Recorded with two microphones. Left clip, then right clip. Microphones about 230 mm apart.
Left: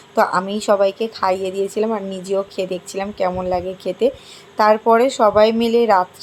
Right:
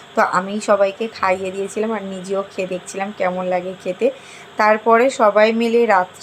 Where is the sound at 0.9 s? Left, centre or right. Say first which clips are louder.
Left 2 dB; centre.